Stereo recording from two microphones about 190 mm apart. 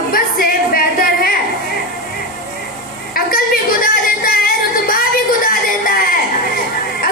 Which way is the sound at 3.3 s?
50° left (ahead or behind).